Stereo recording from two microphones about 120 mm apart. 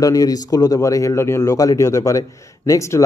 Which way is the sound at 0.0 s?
30° left (ahead or behind).